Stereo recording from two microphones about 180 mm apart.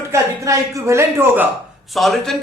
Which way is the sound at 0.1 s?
15° right (ahead or behind).